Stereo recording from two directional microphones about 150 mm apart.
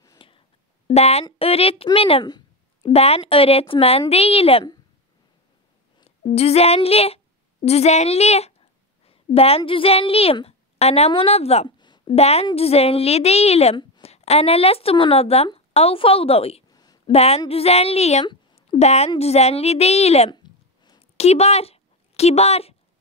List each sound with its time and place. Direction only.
0.2 s music: 35° left (ahead or behind)
0.8 s speech: 45° left (ahead or behind)
6.0 s speech: 45° left (ahead or behind)
7.6 s a sound: 45° left (ahead or behind)
9.7 s speech: 40° left (ahead or behind)
11.8 s a sound: 30° left (ahead or behind)
12.1 s speech: 45° left (ahead or behind)
16.7 s a sound: 25° left (ahead or behind)
17.0 s a woman's voice: 45° left (ahead or behind)
18.2 s speech: 35° left (ahead or behind)
20.2 s a sound: 30° left (ahead or behind)
21.2 s speech: 45° left (ahead or behind)